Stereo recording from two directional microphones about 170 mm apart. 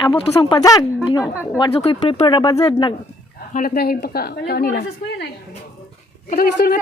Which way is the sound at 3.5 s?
60° left (ahead or behind).